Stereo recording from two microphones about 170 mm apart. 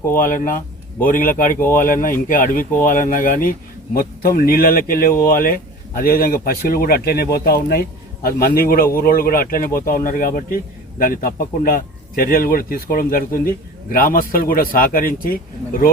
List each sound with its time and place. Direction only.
0.2 s speech: 55° left (ahead or behind)